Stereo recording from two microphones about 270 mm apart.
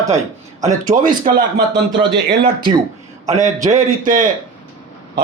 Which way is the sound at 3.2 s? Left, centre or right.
Right.